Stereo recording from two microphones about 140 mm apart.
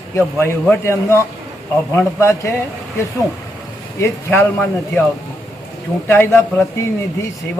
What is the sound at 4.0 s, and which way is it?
Speech, 15° left (ahead or behind).